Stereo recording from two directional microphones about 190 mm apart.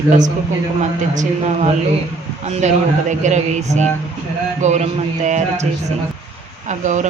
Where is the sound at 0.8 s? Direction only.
40° right (ahead or behind).